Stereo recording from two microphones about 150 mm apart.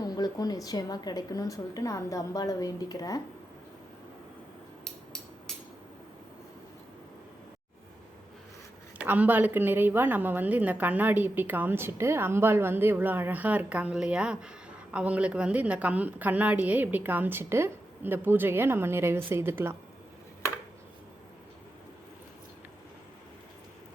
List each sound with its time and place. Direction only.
0.0 s a woman's voice: 25° left (ahead or behind)
9.0 s a woman's voice: 10° right (ahead or behind)